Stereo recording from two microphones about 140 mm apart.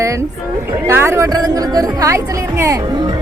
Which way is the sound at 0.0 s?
20° right (ahead or behind).